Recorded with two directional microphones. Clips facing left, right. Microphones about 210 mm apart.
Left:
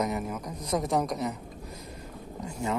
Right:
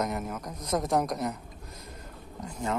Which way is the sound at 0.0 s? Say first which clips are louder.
Left 1 dB; centre (ahead or behind).